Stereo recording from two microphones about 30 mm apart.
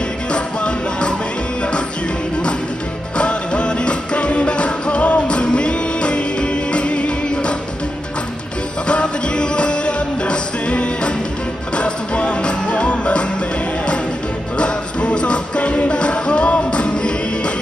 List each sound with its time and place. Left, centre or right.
0.3 s music: left
3.2 s music: left
8.8 s music: left
14.6 s music: left